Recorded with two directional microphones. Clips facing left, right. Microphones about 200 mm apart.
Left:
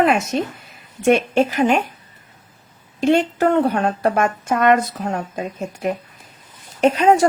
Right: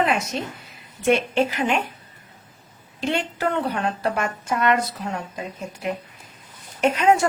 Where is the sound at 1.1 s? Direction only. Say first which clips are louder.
Left 4 dB; 45° left (ahead or behind).